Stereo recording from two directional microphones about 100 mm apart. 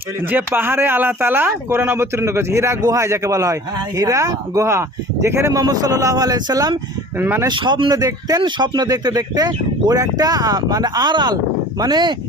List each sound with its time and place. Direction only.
0.3 s speech: 20° right (ahead or behind); by 6.7 s 40° right (ahead or behind)
7.2 s speech: 20° right (ahead or behind)
7.4 s speech: 50° right (ahead or behind)
8.4 s speech: 50° right (ahead or behind)